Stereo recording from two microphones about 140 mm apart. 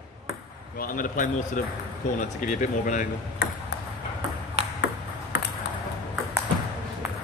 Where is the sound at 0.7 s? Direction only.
80° left.